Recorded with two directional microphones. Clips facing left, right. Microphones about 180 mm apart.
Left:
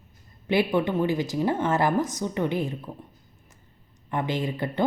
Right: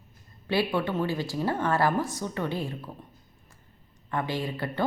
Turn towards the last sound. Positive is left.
turn(degrees=20)  # may be behind; listen again after turning